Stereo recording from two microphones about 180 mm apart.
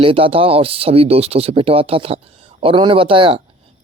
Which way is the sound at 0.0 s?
30° right (ahead or behind).